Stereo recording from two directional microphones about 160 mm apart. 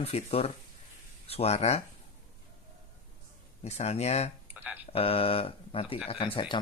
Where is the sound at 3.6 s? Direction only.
40° left (ahead or behind).